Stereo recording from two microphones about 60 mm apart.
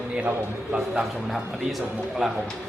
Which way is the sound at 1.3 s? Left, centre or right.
Centre.